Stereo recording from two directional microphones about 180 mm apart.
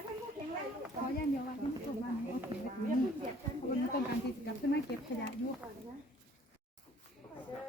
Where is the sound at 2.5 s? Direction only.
30° right (ahead or behind).